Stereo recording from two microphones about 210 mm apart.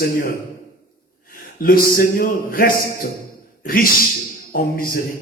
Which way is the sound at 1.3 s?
45° left (ahead or behind).